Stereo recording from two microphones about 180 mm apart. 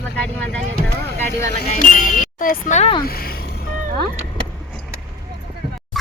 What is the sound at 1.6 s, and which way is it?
Speech, 45° left (ahead or behind).